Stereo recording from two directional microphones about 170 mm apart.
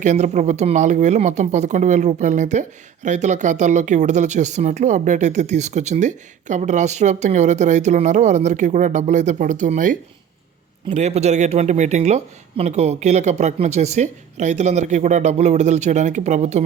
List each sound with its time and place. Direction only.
0.0 s speech: 45° right (ahead or behind)